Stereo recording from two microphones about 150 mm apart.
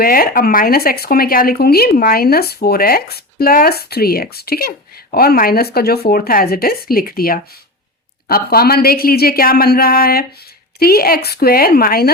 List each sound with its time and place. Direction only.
0.0 s speech: 80° left
8.3 s speech: 90° left